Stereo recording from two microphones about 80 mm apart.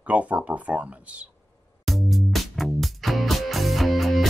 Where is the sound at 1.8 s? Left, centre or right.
Centre.